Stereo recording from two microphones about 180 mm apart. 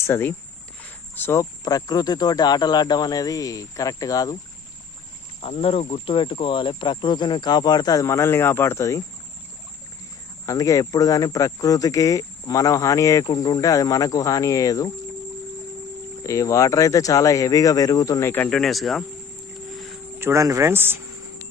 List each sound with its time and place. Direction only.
0.0 s speech: 15° left (ahead or behind)
5.4 s speech: 35° left (ahead or behind); by 9.0 s 15° left (ahead or behind)
10.4 s speech: 20° left (ahead or behind)
16.2 s speech: 15° left (ahead or behind); by 19.0 s centre (ahead or behind)
20.1 s speech: 15° right (ahead or behind)